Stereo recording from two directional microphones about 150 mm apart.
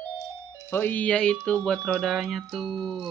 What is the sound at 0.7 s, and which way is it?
Speech, 10° left (ahead or behind).